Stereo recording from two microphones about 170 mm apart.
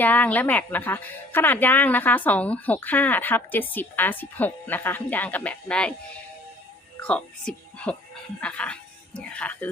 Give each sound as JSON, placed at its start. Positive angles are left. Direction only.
{"t": 0.0, "sound": "a woman's voice", "side_deg": 10}
{"t": 7.0, "sound": "a woman's voice", "side_deg": 5}